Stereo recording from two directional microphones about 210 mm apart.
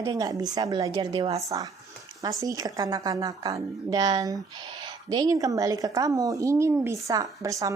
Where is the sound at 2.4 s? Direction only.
15° right (ahead or behind).